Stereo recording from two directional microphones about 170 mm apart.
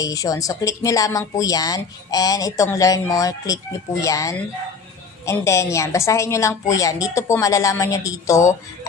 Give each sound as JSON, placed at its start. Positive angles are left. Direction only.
{"t": 0.0, "sound": "a woman's voice", "side_deg": 20}